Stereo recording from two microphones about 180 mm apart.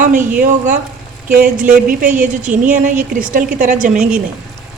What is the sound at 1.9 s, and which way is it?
A woman's voice, 45° right (ahead or behind).